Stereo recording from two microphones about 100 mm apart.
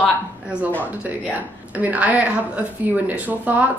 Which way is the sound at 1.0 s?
15° right (ahead or behind).